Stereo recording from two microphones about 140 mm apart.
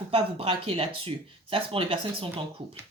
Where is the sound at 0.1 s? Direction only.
40° right (ahead or behind).